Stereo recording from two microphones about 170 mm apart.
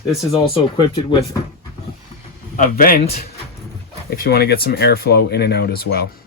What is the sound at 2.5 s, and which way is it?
Speech, 50° left (ahead or behind).